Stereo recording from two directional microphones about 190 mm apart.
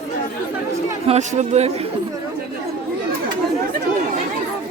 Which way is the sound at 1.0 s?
35° right (ahead or behind).